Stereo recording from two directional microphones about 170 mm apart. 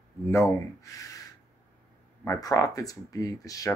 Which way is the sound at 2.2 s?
20° left (ahead or behind).